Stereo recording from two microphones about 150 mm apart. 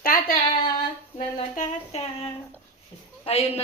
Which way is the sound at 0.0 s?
70° left (ahead or behind).